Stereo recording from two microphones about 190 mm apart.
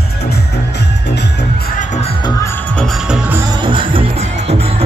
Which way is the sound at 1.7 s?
40° left (ahead or behind).